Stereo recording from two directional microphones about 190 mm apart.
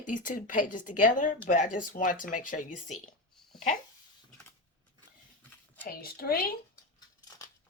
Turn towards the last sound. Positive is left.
turn(degrees=55)  # may be behind; listen again after turning